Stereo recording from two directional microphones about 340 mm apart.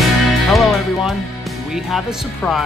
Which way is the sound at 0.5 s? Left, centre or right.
Centre.